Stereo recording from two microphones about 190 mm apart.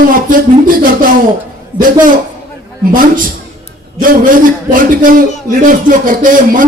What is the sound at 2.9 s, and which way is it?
A man's voice, 45° right (ahead or behind).